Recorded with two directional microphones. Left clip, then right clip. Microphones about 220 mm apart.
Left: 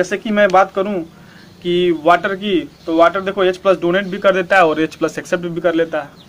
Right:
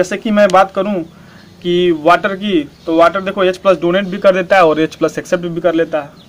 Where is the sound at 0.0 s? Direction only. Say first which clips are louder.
Right 3 dB; 35° right (ahead or behind).